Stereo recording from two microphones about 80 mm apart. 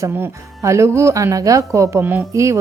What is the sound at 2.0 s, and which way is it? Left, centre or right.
Speech, right.